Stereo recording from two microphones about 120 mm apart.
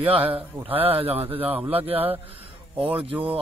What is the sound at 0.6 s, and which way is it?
Speech, 50° right (ahead or behind).